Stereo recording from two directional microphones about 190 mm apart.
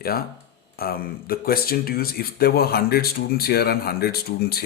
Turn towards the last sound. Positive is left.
turn(degrees=55)  # may be behind; listen again after turning